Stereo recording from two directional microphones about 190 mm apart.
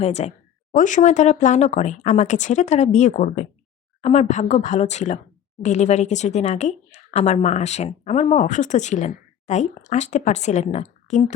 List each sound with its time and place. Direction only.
0.0 s speech: 35° left (ahead or behind)